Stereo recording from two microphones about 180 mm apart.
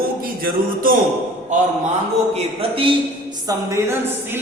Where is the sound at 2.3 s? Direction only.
30° right (ahead or behind).